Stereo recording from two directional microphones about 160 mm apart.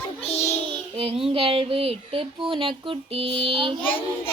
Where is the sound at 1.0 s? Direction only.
35° right (ahead or behind).